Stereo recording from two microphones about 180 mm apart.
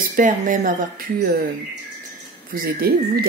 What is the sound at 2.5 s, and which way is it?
Speech, 55° right (ahead or behind).